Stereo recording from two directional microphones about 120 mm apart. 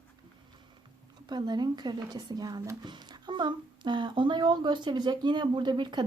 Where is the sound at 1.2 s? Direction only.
35° right (ahead or behind).